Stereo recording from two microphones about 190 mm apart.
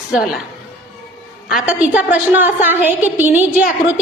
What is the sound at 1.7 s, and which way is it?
A woman's voice, 5° right (ahead or behind).